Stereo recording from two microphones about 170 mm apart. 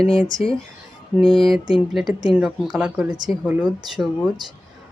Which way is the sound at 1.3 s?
Centre (ahead or behind).